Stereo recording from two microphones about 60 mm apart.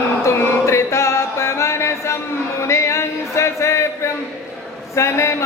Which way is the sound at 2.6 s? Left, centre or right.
Left.